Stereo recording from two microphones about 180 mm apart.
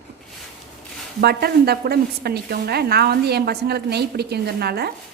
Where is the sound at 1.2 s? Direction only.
60° right (ahead or behind).